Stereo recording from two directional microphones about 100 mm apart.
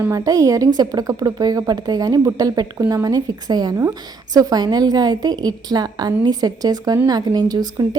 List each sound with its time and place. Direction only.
0.1 s a woman's voice: 35° right (ahead or behind)